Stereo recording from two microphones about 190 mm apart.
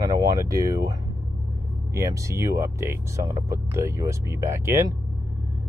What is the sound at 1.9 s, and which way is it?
Speech, 15° right (ahead or behind).